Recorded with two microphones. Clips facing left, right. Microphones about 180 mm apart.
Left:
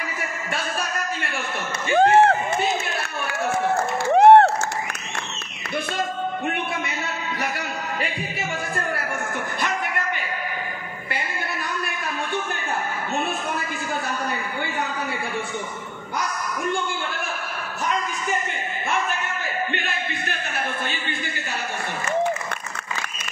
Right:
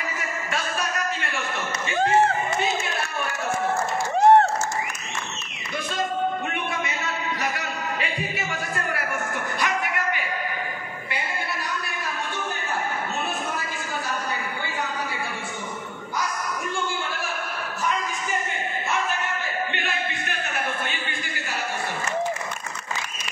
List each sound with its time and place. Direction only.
2.0 s speech: 65° left (ahead or behind)
4.1 s crowd: 65° left (ahead or behind)